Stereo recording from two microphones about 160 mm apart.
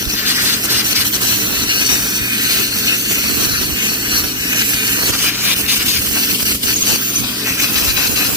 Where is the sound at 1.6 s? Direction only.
30° right (ahead or behind).